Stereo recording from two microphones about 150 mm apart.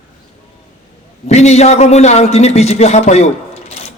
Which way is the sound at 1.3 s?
45° left (ahead or behind).